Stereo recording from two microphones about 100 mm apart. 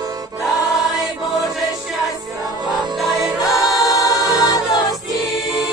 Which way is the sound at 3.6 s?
Centre (ahead or behind).